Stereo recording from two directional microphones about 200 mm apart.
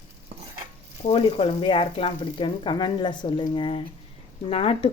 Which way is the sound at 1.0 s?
30° left (ahead or behind).